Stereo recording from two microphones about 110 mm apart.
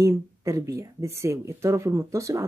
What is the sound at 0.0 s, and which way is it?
Speech, 30° right (ahead or behind).